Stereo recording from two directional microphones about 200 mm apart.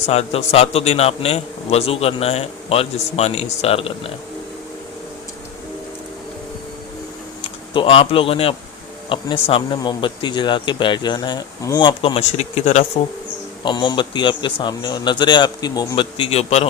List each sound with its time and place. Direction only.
0.0 s a man's voice: 30° left (ahead or behind)
7.7 s speech: 25° left (ahead or behind)
13.7 s speech: 25° left (ahead or behind)